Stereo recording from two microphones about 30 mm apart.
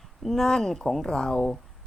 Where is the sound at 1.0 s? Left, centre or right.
Left.